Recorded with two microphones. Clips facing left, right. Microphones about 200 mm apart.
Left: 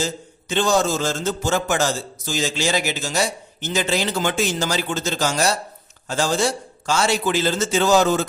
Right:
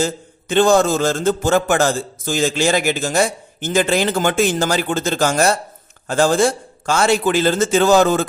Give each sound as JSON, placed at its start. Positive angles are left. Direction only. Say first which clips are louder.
{"t": 0.0, "sound": "a man's voice", "louder": "right 5 dB", "side_deg": -55}